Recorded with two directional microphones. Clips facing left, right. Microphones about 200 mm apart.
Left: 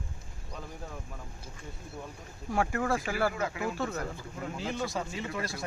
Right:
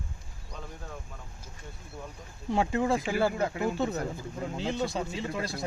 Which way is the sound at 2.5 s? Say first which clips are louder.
Right 3 dB; 20° right (ahead or behind).